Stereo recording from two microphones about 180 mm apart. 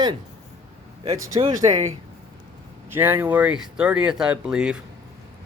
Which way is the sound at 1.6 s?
40° right (ahead or behind).